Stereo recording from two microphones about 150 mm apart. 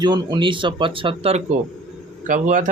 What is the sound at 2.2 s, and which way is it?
Speech, 60° right (ahead or behind).